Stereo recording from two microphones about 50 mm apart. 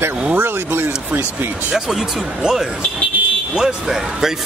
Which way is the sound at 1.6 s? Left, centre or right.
Centre.